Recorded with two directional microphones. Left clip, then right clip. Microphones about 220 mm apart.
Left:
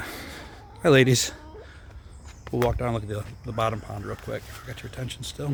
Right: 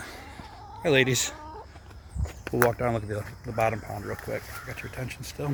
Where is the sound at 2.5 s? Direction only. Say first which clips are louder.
Right 1 dB; 10° left (ahead or behind).